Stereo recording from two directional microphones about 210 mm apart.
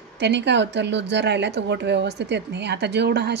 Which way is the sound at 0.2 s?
55° right (ahead or behind).